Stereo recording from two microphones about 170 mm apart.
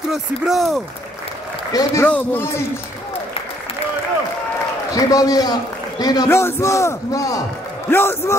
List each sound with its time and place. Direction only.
0.1 s speech: centre (ahead or behind)
1.7 s a man's voice: 20° left (ahead or behind)
2.0 s a man's voice: 10° left (ahead or behind)
4.9 s a man's voice: 20° left (ahead or behind)